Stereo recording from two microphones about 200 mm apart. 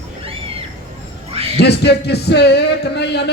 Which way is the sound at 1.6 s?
55° left (ahead or behind).